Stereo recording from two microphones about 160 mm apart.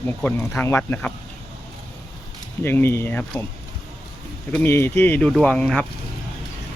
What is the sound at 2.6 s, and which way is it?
Speech, 15° left (ahead or behind).